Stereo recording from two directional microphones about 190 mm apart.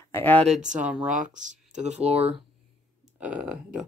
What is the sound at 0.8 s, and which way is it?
Speech, 5° right (ahead or behind).